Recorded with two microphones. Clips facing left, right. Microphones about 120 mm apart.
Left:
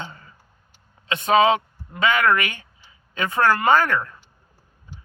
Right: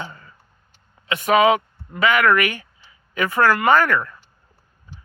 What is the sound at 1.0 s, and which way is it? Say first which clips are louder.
Speech: right 1 dB; 25° left (ahead or behind).